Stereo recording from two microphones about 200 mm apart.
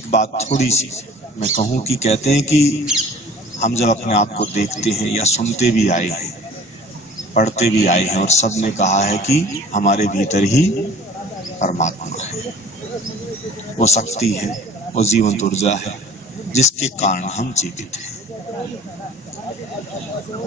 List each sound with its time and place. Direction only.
0.1 s a man's voice: 35° left (ahead or behind)
3.6 s a man's voice: 35° left (ahead or behind)
7.3 s a man's voice: 35° left (ahead or behind)
11.6 s speech: 35° left (ahead or behind)
13.7 s a man's voice: 35° left (ahead or behind)